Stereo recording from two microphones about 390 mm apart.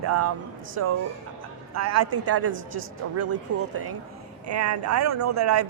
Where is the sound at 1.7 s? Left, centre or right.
Right.